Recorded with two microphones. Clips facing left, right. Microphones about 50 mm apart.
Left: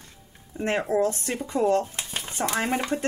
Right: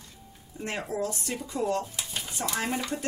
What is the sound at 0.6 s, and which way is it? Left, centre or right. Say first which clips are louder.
Speech: left 8 dB; left.